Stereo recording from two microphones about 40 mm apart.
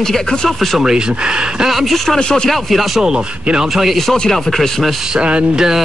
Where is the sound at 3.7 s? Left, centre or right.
Centre.